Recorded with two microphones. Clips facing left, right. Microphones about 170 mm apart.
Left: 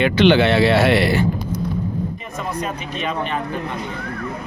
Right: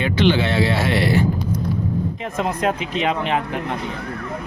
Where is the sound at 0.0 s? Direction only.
70° left (ahead or behind).